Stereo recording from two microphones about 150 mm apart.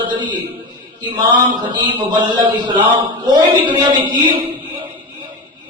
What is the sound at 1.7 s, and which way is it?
Speech, 30° right (ahead or behind).